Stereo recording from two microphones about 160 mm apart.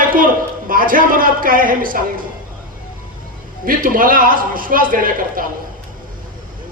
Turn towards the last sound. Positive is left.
turn(degrees=-60)  # may be behind; listen again after turning